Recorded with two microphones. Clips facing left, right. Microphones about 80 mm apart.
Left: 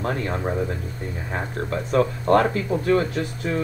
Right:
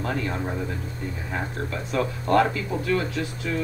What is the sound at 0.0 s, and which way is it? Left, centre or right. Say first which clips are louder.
A man's voice: left 2 dB; left.